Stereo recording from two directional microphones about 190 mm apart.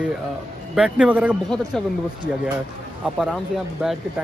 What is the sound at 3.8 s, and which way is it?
Speech, 5° right (ahead or behind).